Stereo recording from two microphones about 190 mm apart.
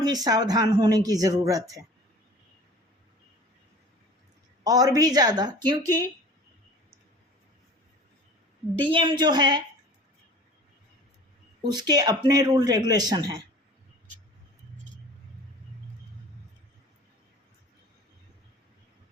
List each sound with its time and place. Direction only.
0.0 s speech: 20° right (ahead or behind)
4.6 s speech: 20° right (ahead or behind)
8.8 s speech: 25° right (ahead or behind)
11.6 s speech: 20° right (ahead or behind)